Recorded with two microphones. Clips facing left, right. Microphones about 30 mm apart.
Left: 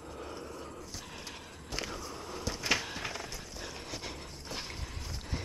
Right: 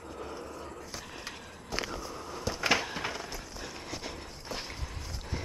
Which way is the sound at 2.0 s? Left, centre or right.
Centre.